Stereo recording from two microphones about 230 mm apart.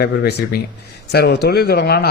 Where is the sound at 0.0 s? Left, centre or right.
Left.